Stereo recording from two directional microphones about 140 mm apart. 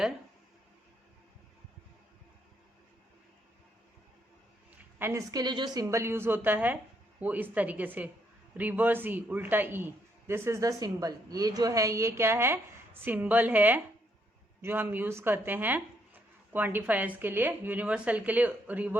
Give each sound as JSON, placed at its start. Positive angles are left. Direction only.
{"t": 4.9, "sound": "a woman's voice", "side_deg": -15}
{"t": 5.3, "sound": "a woman's voice", "side_deg": -30}
{"t": 5.8, "sound": "a man's voice", "side_deg": -20}